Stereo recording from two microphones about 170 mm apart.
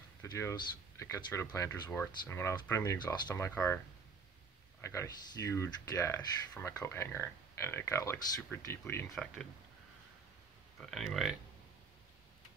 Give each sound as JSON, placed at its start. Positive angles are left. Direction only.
{"t": 0.2, "sound": "speech", "side_deg": 15}
{"t": 4.8, "sound": "speech", "side_deg": 15}
{"t": 9.1, "sound": "speech", "side_deg": 5}
{"t": 10.8, "sound": "speech", "side_deg": 0}